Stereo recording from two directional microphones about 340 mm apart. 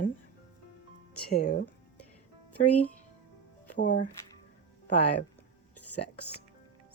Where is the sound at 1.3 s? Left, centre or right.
Left.